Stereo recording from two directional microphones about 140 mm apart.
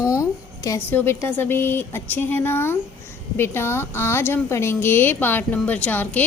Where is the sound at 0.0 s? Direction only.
20° left (ahead or behind).